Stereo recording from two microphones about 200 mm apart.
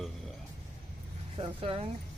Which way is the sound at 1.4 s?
30° right (ahead or behind).